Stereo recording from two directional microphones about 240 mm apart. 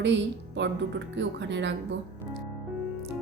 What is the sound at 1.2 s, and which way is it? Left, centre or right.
Speech, right.